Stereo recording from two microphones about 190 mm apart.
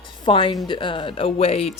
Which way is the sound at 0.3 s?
25° left (ahead or behind).